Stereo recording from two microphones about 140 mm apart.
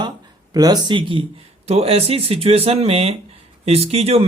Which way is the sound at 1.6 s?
45° right (ahead or behind).